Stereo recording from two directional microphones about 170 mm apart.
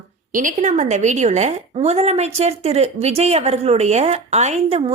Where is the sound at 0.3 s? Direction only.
50° right (ahead or behind).